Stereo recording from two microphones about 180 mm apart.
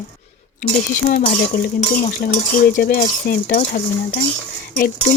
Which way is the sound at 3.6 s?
40° left (ahead or behind).